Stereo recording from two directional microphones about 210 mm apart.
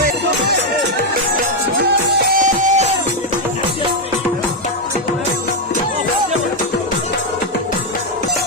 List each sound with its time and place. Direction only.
2.4 s music: 35° right (ahead or behind)